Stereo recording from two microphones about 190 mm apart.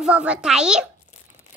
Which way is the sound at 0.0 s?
5° right (ahead or behind).